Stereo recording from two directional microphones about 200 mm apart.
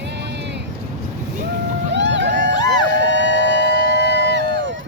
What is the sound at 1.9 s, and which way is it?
Boat, 60° right (ahead or behind).